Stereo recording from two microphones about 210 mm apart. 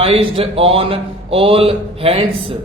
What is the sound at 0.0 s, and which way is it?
A man's voice, 25° right (ahead or behind).